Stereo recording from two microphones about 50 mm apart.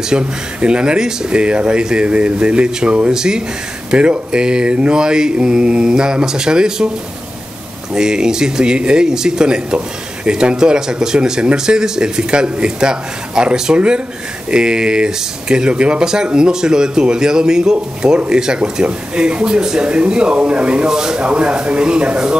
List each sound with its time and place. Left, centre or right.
0.1 s speech: right
3.1 s speech: centre
7.9 s speech: centre